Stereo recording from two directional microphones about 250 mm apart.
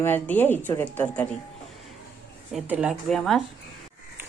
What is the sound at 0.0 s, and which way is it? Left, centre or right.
A woman's voice, centre.